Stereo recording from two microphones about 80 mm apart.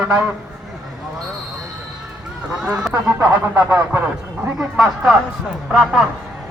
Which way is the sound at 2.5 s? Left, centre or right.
Centre.